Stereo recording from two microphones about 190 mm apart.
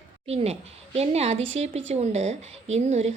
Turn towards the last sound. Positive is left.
turn(degrees=-35)  # may be behind; listen again after turning